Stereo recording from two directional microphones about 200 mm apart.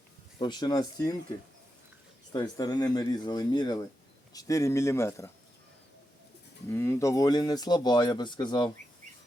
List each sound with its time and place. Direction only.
0.3 s speech: 20° left (ahead or behind)
2.3 s speech: 20° left (ahead or behind)
6.7 s speech: 10° left (ahead or behind)